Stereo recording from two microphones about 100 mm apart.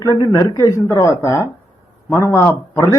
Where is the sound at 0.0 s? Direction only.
35° left (ahead or behind).